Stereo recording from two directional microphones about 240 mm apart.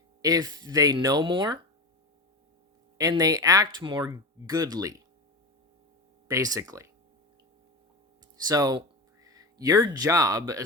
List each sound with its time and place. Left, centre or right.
0.2 s speech: centre
3.0 s speech: centre
6.2 s speech: centre
8.4 s speech: centre